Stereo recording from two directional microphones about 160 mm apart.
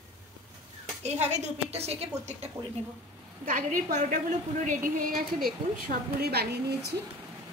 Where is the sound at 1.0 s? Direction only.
45° right (ahead or behind).